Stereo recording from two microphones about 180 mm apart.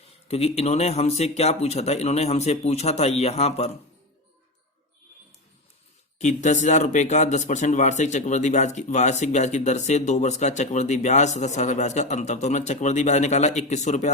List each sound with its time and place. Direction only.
0.3 s speech: 35° left (ahead or behind)
6.1 s speech: 40° left (ahead or behind)